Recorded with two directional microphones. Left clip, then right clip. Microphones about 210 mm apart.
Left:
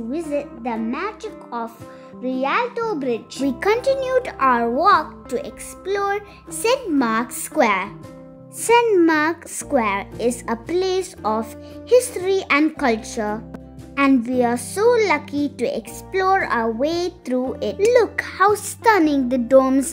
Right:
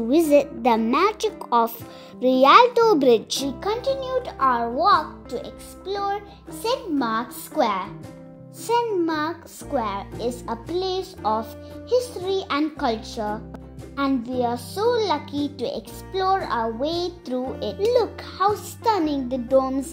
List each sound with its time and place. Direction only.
0.1 s a woman's voice: 35° right (ahead or behind)
3.4 s a child's voice: 20° left (ahead or behind)